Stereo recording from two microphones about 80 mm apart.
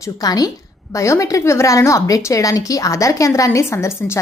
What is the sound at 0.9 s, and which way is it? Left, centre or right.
A woman's voice, left.